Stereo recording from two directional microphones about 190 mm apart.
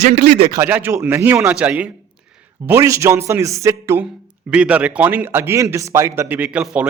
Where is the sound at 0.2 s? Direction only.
60° right (ahead or behind).